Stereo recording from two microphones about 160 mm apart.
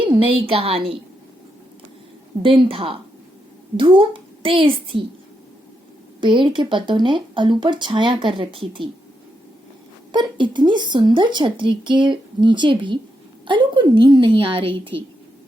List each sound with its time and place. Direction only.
0.0 s speech: 35° right (ahead or behind)
2.4 s speech: 35° right (ahead or behind)
6.1 s speech: 30° right (ahead or behind)
10.1 s speech: 30° right (ahead or behind)